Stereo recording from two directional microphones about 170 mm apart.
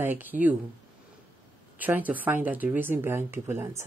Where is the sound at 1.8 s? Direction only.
10° right (ahead or behind).